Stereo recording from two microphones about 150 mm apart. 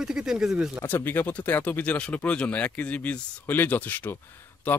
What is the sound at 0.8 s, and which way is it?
Speech, 15° left (ahead or behind).